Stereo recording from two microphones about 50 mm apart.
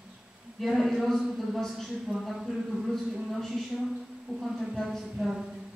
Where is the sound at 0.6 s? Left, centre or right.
Centre.